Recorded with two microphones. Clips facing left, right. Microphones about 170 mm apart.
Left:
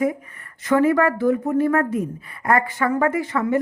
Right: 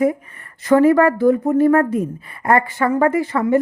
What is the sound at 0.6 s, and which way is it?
Speech, 35° right (ahead or behind).